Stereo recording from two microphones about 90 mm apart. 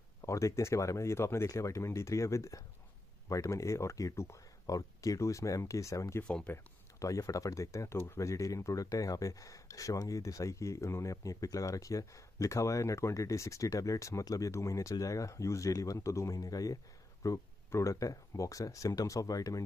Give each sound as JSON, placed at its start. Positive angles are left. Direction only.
{"t": 0.2, "sound": "speech", "side_deg": 35}
{"t": 6.2, "sound": "speech", "side_deg": 10}
{"t": 6.5, "sound": "speech", "side_deg": 35}